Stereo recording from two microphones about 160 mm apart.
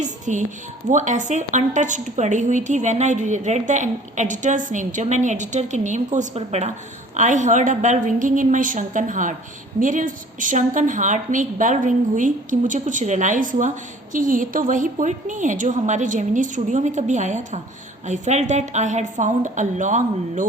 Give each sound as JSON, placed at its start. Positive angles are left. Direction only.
{"t": 0.0, "sound": "a woman's voice", "side_deg": -50}